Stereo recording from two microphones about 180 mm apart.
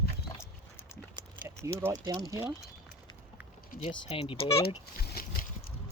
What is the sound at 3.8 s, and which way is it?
Speech, 35° left (ahead or behind).